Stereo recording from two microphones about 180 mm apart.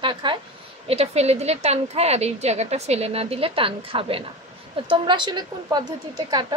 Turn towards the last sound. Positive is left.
turn(degrees=-25)  # may be behind; listen again after turning